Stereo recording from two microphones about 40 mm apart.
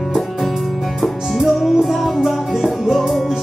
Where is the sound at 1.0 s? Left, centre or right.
Centre.